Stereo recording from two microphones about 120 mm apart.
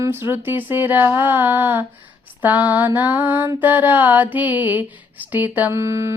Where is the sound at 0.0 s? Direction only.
20° right (ahead or behind).